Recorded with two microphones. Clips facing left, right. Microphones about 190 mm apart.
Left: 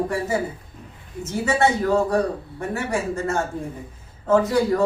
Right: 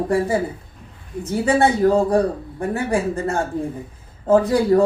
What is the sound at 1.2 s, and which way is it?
Speech, 30° right (ahead or behind).